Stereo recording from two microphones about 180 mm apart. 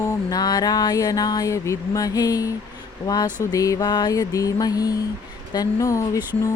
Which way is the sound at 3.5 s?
20° left (ahead or behind).